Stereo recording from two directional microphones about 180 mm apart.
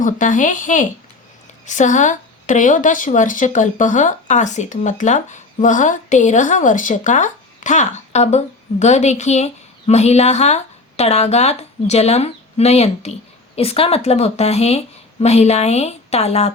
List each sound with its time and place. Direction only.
0.0 s a woman's voice: 45° left (ahead or behind)